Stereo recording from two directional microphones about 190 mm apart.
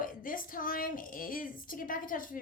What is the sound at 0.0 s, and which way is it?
A woman's voice, 45° left (ahead or behind).